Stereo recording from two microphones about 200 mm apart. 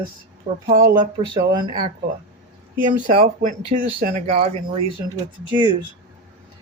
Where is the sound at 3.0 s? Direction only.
40° right (ahead or behind).